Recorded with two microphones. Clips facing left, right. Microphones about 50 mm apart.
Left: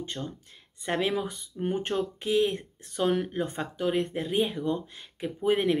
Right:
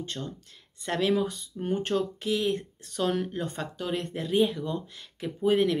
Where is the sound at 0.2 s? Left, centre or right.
Centre.